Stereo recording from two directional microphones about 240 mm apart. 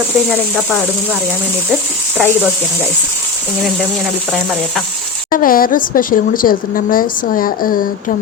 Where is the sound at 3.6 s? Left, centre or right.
Centre.